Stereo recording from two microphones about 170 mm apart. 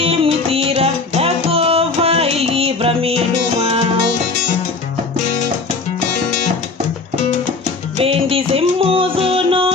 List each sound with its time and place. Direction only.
0.0 s music: 35° right (ahead or behind)
8.0 s music: 35° right (ahead or behind)